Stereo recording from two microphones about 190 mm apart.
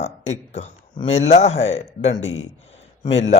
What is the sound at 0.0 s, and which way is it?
A man's voice, 35° left (ahead or behind).